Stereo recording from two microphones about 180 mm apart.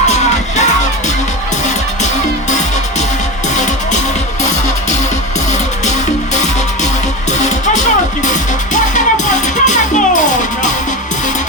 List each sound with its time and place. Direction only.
0.0 s music: 40° left (ahead or behind)
7.3 s music: 40° left (ahead or behind)